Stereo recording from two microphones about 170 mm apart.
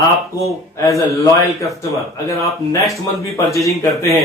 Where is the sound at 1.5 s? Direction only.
Centre (ahead or behind).